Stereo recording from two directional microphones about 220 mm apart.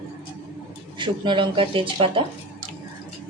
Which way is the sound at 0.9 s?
20° right (ahead or behind).